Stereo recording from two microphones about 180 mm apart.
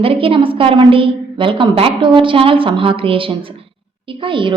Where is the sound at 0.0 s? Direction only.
30° right (ahead or behind).